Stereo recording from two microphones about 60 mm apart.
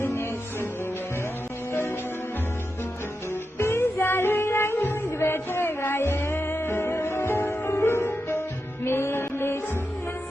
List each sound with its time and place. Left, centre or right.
0.1 s music: left
3.6 s music: left